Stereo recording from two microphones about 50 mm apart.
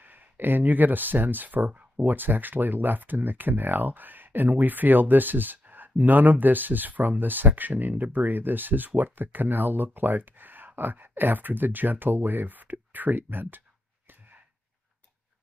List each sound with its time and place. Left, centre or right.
0.0 s speech: right
1.7 s a sound: right
2.0 s speech: right